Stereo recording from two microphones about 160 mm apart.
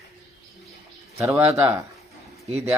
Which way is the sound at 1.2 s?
15° right (ahead or behind).